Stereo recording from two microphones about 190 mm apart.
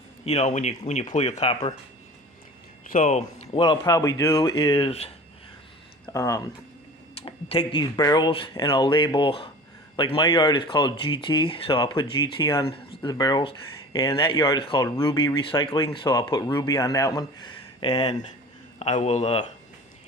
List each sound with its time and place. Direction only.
0.3 s speech: 35° left (ahead or behind)
2.9 s speech: 40° left (ahead or behind)
3.4 s speech: 25° left (ahead or behind)
6.1 s speech: 15° left (ahead or behind)
7.2 s speech: 30° left (ahead or behind)
18.8 s speech: 35° left (ahead or behind)